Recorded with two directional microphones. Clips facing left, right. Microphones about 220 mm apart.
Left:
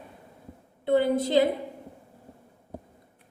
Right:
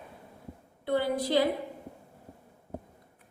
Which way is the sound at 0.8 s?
25° left (ahead or behind).